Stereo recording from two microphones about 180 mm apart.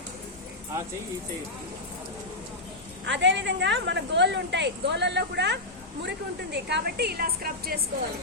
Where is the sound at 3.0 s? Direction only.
80° right; by 7.8 s 55° right (ahead or behind).